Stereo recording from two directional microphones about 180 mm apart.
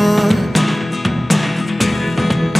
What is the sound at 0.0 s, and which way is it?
Music, centre (ahead or behind).